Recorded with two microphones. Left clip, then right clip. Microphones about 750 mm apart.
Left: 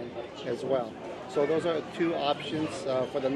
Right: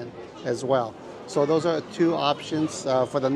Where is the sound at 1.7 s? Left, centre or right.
Right.